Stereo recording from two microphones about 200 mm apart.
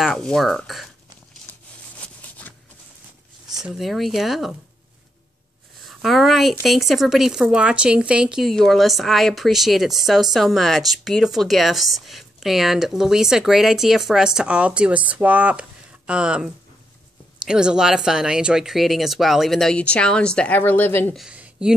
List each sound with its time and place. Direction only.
0.0 s speech: centre (ahead or behind)
3.6 s speech: centre (ahead or behind)
5.9 s speech: centre (ahead or behind)